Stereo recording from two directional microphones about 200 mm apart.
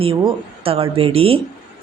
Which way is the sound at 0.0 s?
25° right (ahead or behind).